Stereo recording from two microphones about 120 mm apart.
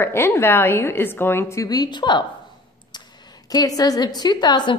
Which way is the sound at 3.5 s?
30° left (ahead or behind).